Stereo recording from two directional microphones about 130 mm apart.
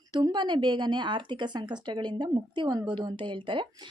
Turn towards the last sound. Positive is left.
turn(degrees=-40)  # may be behind; listen again after turning